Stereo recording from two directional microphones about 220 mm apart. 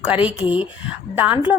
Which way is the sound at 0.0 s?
5° right (ahead or behind).